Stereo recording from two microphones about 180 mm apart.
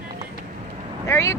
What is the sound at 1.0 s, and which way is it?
Speech, 15° left (ahead or behind).